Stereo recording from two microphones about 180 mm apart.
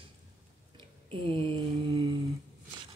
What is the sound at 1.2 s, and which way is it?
Speech, 30° right (ahead or behind).